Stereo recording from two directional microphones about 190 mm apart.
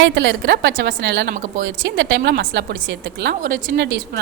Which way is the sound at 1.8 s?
70° right (ahead or behind).